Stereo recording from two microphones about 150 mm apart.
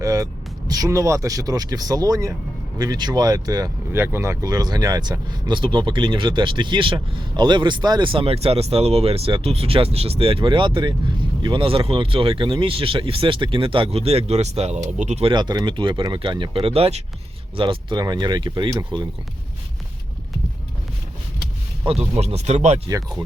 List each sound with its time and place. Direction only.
0.0 s vehicle: 25° right (ahead or behind)
0.7 s speech: 20° right (ahead or behind); by 15.3 s 50° right (ahead or behind)
15.3 s speech: 30° right (ahead or behind)
21.8 s speech: 45° right (ahead or behind)